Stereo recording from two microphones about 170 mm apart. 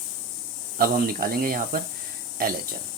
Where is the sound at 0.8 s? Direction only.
60° right (ahead or behind).